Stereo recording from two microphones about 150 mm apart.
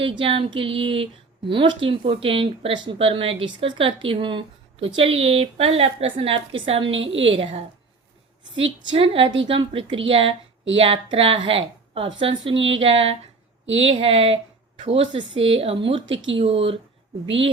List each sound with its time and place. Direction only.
0.0 s speech: 35° right (ahead or behind)